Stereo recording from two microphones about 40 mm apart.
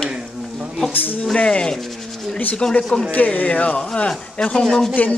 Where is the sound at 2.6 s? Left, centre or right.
Centre.